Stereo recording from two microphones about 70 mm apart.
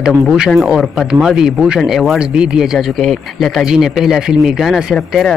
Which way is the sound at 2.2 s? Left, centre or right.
Centre.